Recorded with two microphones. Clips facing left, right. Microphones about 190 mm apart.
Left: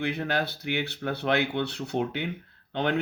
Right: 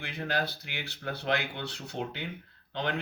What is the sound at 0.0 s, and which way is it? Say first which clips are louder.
Speech: left 5 dB; 60° left (ahead or behind).